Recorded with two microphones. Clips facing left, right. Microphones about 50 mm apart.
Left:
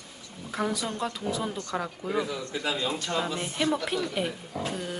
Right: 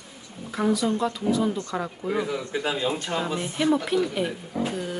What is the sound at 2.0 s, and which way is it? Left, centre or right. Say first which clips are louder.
Speech: right 3 dB; centre.